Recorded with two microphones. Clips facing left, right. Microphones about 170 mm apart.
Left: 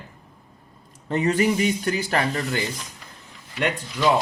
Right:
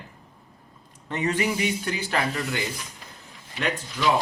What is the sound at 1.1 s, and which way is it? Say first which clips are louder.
Speech: left 5 dB; 40° left (ahead or behind).